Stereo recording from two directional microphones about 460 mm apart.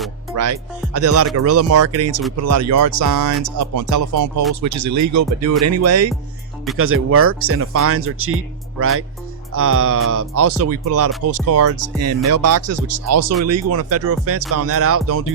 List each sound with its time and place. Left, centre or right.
0.3 s speech: right